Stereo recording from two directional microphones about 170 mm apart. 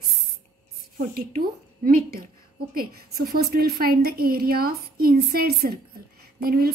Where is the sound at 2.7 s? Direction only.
60° right (ahead or behind).